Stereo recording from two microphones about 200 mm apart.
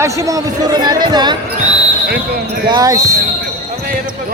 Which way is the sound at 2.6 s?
20° right (ahead or behind).